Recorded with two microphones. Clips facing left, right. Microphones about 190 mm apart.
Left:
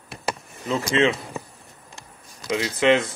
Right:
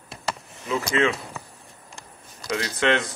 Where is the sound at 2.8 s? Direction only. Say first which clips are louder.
Left 4 dB; 5° left (ahead or behind).